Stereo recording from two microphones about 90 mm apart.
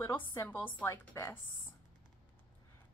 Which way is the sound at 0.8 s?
30° left (ahead or behind).